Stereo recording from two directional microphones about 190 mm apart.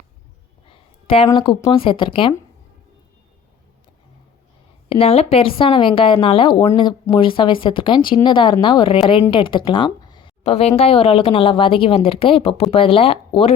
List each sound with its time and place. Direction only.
0.7 s a sound: 30° left (ahead or behind)
1.3 s a woman's voice: 25° left (ahead or behind)
4.9 s a woman's voice: 30° left (ahead or behind)